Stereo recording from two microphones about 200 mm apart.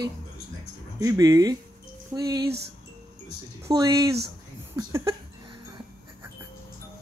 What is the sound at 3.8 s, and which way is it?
Speech, 20° right (ahead or behind).